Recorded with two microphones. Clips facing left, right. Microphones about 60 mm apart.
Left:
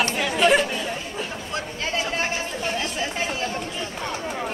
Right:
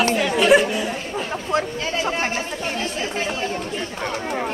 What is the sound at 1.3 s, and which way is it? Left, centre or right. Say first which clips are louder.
Speech: right 8 dB; right.